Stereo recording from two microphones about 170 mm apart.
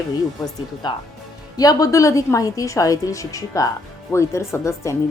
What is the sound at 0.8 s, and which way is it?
A woman's voice, 25° left (ahead or behind).